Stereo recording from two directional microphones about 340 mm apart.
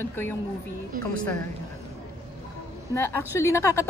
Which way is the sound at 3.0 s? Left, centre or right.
Centre.